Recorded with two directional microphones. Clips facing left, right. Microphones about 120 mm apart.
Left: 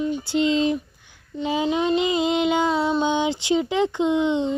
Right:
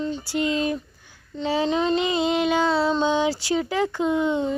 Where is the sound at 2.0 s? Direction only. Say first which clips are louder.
Left 1 dB; 25° right (ahead or behind).